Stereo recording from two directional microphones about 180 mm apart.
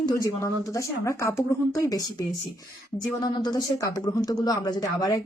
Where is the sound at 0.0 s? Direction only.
20° left (ahead or behind).